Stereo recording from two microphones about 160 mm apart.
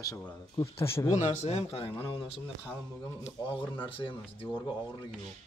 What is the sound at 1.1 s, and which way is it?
A man's voice, 45° left (ahead or behind).